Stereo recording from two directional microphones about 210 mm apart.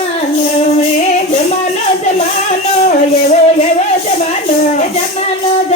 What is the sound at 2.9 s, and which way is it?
Music, 30° left (ahead or behind).